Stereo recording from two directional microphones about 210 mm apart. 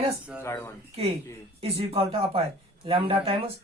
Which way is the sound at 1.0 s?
30° right (ahead or behind).